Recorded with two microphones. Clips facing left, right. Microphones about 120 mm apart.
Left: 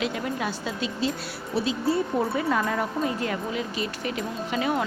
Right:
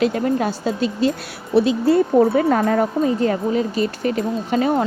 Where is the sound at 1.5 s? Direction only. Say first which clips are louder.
Right 10 dB; 60° right (ahead or behind).